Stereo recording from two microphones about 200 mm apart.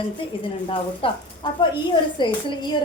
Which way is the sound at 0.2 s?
25° left (ahead or behind).